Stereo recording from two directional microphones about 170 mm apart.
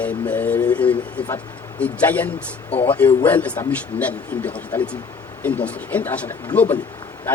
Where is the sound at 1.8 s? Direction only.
10° left (ahead or behind).